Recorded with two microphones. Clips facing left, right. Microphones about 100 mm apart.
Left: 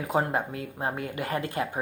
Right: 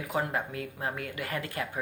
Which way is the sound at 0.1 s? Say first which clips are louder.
Left 4 dB; 25° left (ahead or behind).